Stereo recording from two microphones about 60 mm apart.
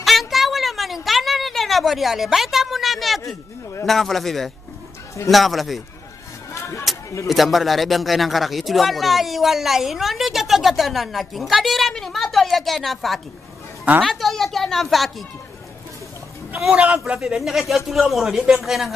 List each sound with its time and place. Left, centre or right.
0.0 s a sound: centre
3.8 s a man's voice: centre
6.9 s a sound: centre
7.2 s a man's voice: centre
16.7 s a man's voice: right
17.2 s a man's voice: centre